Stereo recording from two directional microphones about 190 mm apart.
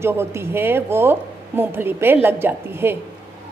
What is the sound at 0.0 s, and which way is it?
A woman's voice, 15° right (ahead or behind).